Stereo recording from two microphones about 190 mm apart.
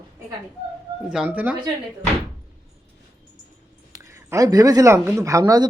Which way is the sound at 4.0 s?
15° right (ahead or behind).